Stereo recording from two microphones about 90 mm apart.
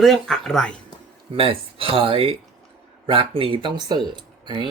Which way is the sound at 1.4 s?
85° right.